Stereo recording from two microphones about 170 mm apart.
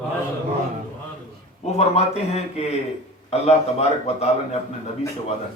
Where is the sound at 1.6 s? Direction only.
40° left (ahead or behind).